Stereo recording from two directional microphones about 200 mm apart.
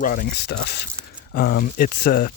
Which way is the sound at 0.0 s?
45° left (ahead or behind).